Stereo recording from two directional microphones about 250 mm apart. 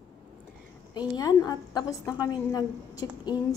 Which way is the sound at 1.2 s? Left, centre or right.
Centre.